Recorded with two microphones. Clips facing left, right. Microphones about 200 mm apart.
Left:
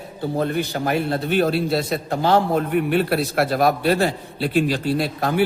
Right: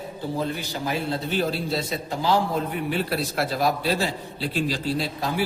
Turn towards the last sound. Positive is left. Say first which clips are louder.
# left 6 dB
turn(degrees=60)  # may be behind; listen again after turning